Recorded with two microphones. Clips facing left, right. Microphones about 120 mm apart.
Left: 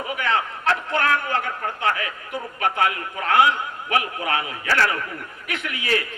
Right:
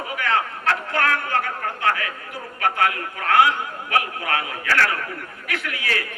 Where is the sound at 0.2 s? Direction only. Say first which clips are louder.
Right 2 dB; 20° left (ahead or behind).